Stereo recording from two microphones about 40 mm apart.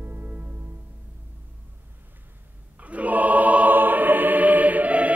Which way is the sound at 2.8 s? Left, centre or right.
Right.